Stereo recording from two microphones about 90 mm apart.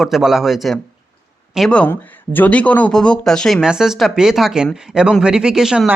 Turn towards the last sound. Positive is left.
turn(degrees=-5)  # may be behind; listen again after turning